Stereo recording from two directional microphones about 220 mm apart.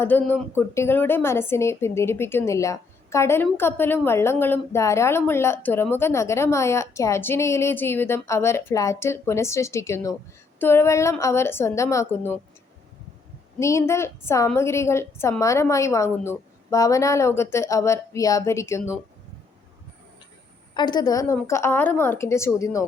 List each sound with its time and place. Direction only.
0.0 s a woman's voice: 10° left (ahead or behind)
13.6 s a woman's voice: 15° left (ahead or behind)
20.7 s a woman's voice: 20° left (ahead or behind)